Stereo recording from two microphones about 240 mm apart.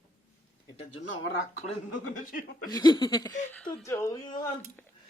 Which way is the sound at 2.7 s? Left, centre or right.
Centre.